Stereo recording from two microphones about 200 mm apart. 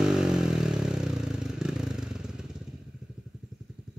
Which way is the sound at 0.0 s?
Centre (ahead or behind).